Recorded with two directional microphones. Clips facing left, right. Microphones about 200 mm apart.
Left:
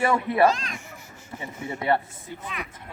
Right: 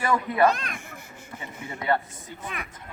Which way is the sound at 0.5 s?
60° right (ahead or behind).